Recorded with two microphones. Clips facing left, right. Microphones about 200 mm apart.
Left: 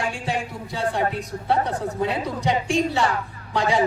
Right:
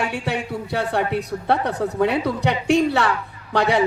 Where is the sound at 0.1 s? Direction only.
65° right (ahead or behind).